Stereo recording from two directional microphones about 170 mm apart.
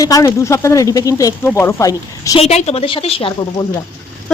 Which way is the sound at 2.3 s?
40° left (ahead or behind).